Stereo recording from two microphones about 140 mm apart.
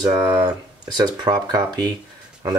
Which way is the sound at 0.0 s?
30° right (ahead or behind).